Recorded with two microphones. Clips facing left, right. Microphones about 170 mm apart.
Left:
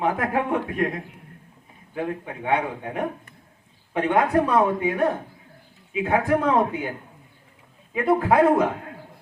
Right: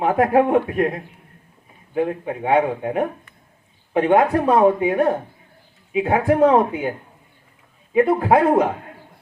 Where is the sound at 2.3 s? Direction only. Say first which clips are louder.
Right 6 dB; 40° right (ahead or behind).